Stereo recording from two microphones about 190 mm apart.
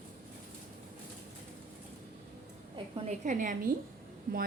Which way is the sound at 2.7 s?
40° right (ahead or behind).